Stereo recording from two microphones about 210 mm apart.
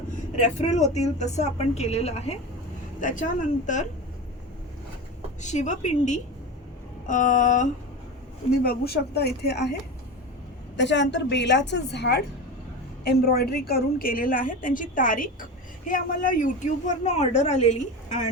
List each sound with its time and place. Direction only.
0.3 s a woman's voice: 35° left (ahead or behind)
5.4 s a woman's voice: 35° left (ahead or behind)
8.6 s speech: 50° left (ahead or behind)
10.8 s a woman's voice: 55° left (ahead or behind); by 18.3 s 35° left (ahead or behind)